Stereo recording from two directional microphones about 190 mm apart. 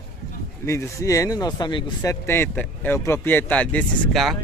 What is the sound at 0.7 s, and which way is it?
Speech, 15° left (ahead or behind).